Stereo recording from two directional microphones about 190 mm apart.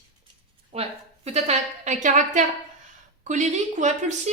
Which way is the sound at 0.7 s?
35° right (ahead or behind).